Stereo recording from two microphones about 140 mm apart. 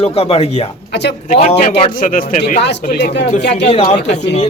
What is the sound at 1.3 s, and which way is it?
Speech, 60° left (ahead or behind).